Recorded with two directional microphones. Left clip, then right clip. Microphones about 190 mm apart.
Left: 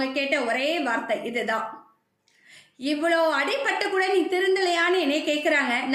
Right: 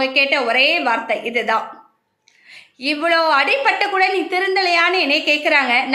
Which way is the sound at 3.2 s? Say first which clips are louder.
Right 8 dB; 15° left (ahead or behind).